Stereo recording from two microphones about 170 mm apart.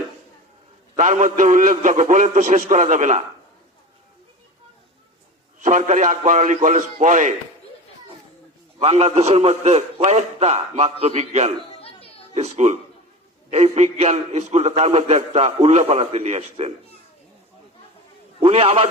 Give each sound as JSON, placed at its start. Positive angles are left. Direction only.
{"t": 0.9, "sound": "a man's voice", "side_deg": -40}
{"t": 5.6, "sound": "a man's voice", "side_deg": -45}
{"t": 8.8, "sound": "a man's voice", "side_deg": -40}
{"t": 11.8, "sound": "a sound", "side_deg": 35}
{"t": 12.3, "sound": "a man's voice", "side_deg": -40}
{"t": 18.3, "sound": "a man's voice", "side_deg": -35}